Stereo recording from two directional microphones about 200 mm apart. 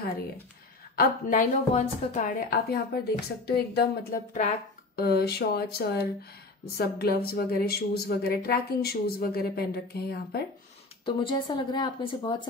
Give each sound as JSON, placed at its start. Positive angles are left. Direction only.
{"t": 0.9, "sound": "a woman's voice", "side_deg": 40}
{"t": 4.3, "sound": "a woman's voice", "side_deg": 35}
{"t": 4.9, "sound": "speech", "side_deg": 50}
{"t": 11.1, "sound": "speech", "side_deg": 25}